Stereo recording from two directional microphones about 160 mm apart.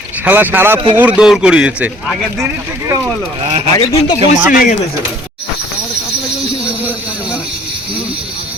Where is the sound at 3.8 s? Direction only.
35° left (ahead or behind).